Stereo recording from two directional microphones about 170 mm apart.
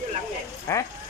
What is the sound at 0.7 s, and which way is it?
Speech, 15° left (ahead or behind).